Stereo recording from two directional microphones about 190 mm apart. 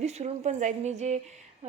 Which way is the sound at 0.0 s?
35° right (ahead or behind).